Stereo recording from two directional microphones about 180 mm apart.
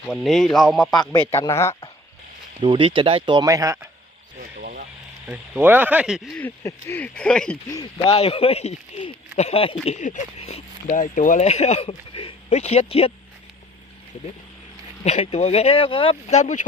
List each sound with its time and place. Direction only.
0.1 s a man's voice: centre (ahead or behind)
1.3 s speech: 15° left (ahead or behind)
2.6 s speech: 30° right (ahead or behind)
4.4 s a sound: 50° right (ahead or behind)
5.2 s speech: 10° right (ahead or behind)
6.4 s speech: 15° left (ahead or behind)
8.0 s speech: 35° left (ahead or behind)
15.0 s speech: 35° left (ahead or behind)